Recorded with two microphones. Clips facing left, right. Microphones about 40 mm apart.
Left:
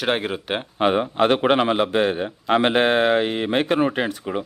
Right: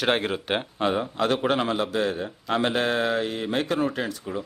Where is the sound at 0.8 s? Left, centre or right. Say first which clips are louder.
Left 8 dB; left.